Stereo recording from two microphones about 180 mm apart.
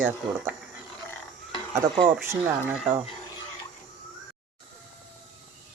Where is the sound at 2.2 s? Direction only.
10° right (ahead or behind).